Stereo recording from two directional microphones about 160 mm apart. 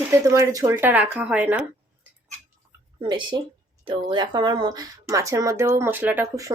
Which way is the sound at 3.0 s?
30° right (ahead or behind).